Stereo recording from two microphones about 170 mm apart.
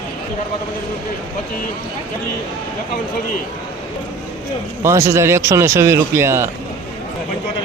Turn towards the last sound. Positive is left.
turn(degrees=-15)  # may be behind; listen again after turning